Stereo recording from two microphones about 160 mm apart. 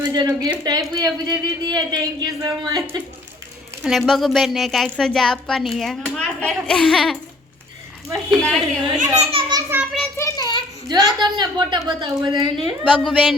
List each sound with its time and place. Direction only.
0.0 s a woman's voice: 25° right (ahead or behind)
3.8 s a woman's voice: centre (ahead or behind)
8.3 s a woman's voice: centre (ahead or behind)
9.0 s a child's voice: 40° right (ahead or behind)
10.2 s a sound: 20° left (ahead or behind)
10.8 s speech: 25° right (ahead or behind)
12.8 s a woman's voice: 5° left (ahead or behind)